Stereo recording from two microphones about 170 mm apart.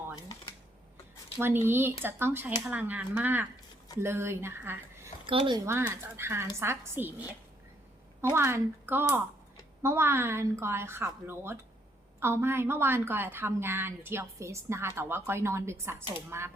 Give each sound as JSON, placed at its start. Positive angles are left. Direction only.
{"t": 1.4, "sound": "a woman's voice", "side_deg": -15}
{"t": 5.2, "sound": "speech", "side_deg": -30}
{"t": 5.6, "sound": "a woman's voice", "side_deg": -15}